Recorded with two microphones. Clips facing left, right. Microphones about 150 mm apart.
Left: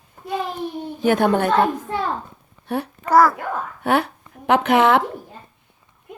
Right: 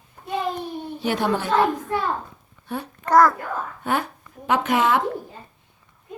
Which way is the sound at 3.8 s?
70° left (ahead or behind).